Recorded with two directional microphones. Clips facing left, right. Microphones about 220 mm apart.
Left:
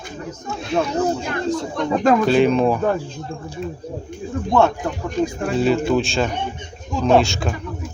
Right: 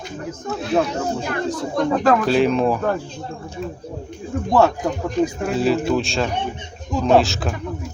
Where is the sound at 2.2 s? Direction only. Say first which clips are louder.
Left 2 dB; centre (ahead or behind).